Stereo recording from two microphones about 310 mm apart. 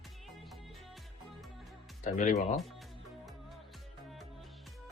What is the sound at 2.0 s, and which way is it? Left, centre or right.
Music, left.